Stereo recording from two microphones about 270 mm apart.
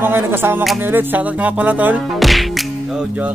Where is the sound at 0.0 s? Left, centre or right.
Centre.